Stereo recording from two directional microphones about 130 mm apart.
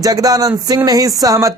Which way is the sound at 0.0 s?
30° right (ahead or behind).